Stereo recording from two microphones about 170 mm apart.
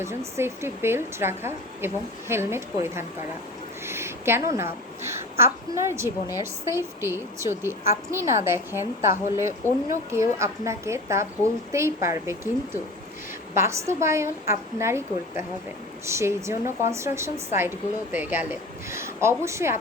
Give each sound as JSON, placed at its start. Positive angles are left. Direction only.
{"t": 0.0, "sound": "a woman's voice", "side_deg": -15}